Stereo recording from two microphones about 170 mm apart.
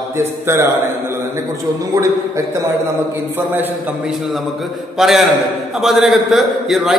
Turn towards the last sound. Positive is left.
turn(degrees=0)  # may be behind; listen again after turning